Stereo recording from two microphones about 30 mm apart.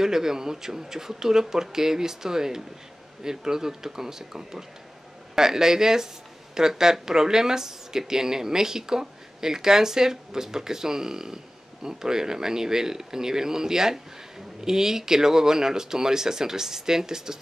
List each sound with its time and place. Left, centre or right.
0.0 s speech: centre